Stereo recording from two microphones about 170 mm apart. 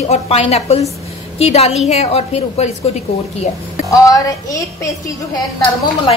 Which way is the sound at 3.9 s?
20° left (ahead or behind).